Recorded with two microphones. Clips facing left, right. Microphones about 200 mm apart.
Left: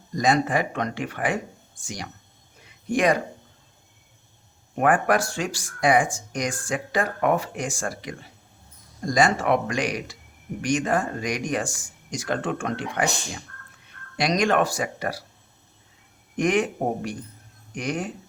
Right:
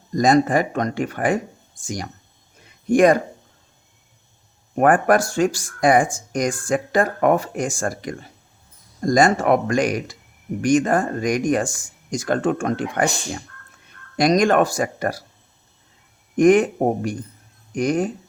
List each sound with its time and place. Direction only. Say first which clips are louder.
0.2 s speech: right 6 dB; 45° right (ahead or behind)
2.9 s speech: right 7 dB; 45° right (ahead or behind)
4.7 s speech: right 5 dB; 45° right (ahead or behind)
16.4 s speech: right 8 dB; 45° right (ahead or behind)